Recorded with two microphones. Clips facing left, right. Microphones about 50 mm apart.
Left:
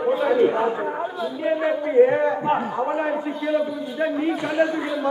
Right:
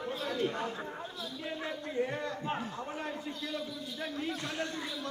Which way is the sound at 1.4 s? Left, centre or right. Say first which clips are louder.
Left 17 dB; left.